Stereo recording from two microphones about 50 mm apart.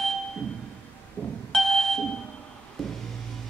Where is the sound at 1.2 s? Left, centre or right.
Left.